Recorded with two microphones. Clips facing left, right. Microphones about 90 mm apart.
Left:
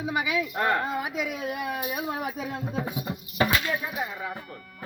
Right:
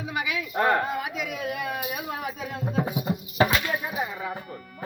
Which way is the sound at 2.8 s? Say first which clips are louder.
Right 4 dB; 15° right (ahead or behind).